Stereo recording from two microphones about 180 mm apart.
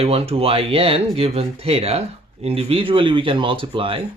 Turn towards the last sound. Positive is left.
turn(degrees=-30)  # may be behind; listen again after turning